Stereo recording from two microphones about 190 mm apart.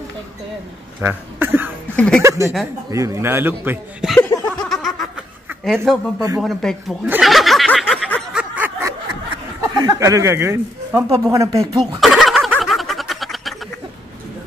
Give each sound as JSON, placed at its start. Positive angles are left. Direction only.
{"t": 1.0, "sound": "speech", "side_deg": -10}
{"t": 2.0, "sound": "speech", "side_deg": 5}
{"t": 2.2, "sound": "speech", "side_deg": -15}
{"t": 4.2, "sound": "snicker", "side_deg": 10}
{"t": 5.6, "sound": "speech", "side_deg": 0}
{"t": 7.1, "sound": "snicker", "side_deg": 0}
{"t": 9.8, "sound": "speech", "side_deg": -20}
{"t": 12.0, "sound": "snicker", "side_deg": 0}